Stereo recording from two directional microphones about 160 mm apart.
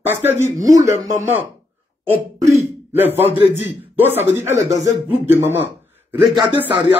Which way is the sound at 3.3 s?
35° left (ahead or behind).